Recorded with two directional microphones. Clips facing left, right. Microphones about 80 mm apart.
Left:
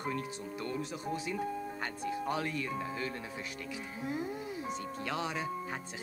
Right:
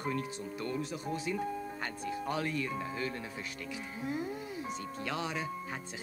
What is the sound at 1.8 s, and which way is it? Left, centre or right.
Speech, centre.